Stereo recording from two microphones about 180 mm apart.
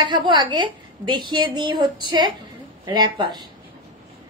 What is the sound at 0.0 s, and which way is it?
A woman's voice, 25° right (ahead or behind).